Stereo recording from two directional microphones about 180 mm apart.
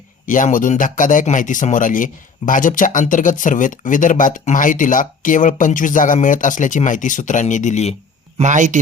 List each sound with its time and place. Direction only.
0.3 s speech: 45° left (ahead or behind)
8.4 s speech: 45° right (ahead or behind)